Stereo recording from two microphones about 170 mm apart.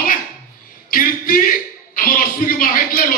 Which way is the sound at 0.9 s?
55° left (ahead or behind).